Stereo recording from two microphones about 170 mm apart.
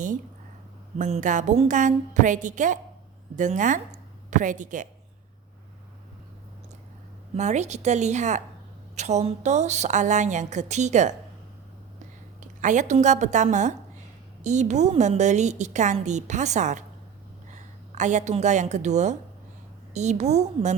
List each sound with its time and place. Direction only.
0.9 s a woman's voice: 45° right (ahead or behind)
7.3 s a woman's voice: 45° right (ahead or behind)
12.4 s a woman's voice: 45° right (ahead or behind)